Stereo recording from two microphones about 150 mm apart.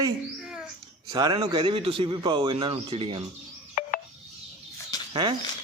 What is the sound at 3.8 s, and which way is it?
Telephone dialing, 65° left (ahead or behind).